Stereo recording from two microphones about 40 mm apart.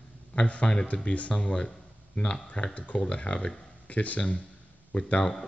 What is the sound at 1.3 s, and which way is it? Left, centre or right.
Speech, left.